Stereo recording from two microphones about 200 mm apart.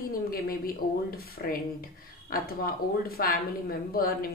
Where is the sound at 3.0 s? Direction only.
50° left (ahead or behind).